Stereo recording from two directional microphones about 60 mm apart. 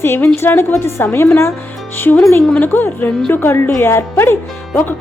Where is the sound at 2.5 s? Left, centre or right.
Left.